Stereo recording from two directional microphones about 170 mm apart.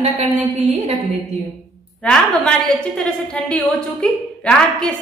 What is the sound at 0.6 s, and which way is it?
Speech, 35° right (ahead or behind).